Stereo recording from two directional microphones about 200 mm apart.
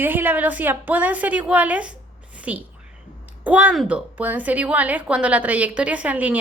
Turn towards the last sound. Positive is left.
turn(degrees=-10)  # may be behind; listen again after turning